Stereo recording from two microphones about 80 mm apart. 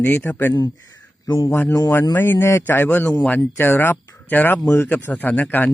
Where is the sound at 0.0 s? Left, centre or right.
Centre.